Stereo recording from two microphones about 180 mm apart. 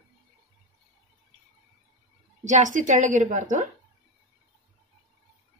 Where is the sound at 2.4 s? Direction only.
45° right (ahead or behind).